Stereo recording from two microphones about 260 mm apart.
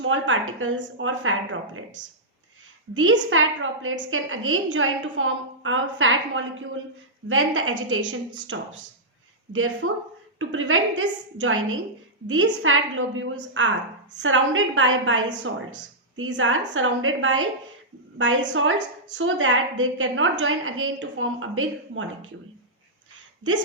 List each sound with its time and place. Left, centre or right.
0.0 s a woman's voice: right
2.9 s a woman's voice: right